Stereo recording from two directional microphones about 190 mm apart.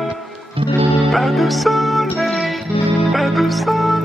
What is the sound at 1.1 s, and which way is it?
Music, centre (ahead or behind).